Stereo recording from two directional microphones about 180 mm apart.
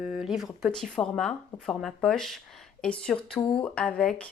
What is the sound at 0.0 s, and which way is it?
A woman's voice, 5° right (ahead or behind).